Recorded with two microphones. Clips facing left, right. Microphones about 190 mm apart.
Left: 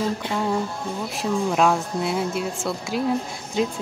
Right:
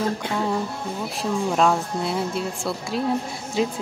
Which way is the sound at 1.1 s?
Centre (ahead or behind).